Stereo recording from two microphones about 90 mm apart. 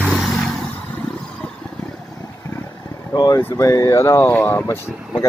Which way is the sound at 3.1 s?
50° left (ahead or behind).